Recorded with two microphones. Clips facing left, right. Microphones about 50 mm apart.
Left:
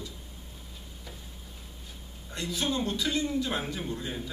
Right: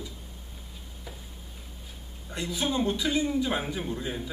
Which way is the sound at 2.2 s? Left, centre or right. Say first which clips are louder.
Right 1 dB; centre.